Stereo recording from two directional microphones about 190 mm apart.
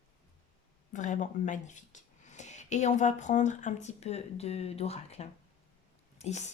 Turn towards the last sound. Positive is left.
turn(degrees=35)  # may be behind; listen again after turning